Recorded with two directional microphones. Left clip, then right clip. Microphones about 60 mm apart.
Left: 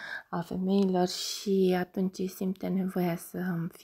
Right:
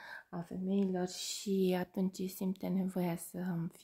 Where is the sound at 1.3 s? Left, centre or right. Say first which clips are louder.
Left 5 dB; left.